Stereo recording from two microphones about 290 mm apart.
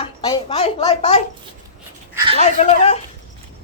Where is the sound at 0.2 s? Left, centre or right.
Centre.